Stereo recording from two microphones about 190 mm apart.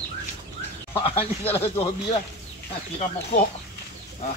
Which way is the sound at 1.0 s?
30° left (ahead or behind).